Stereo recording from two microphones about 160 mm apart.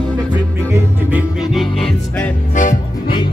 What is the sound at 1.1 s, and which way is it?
Music, 5° right (ahead or behind).